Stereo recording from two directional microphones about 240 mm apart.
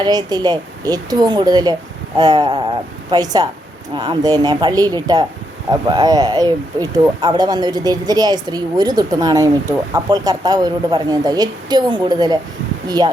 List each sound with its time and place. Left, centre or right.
0.0 s speech: centre